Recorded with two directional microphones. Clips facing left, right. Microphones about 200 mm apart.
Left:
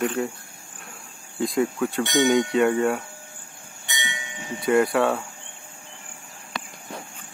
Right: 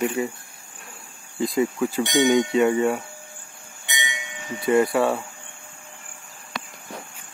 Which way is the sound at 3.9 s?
20° right (ahead or behind).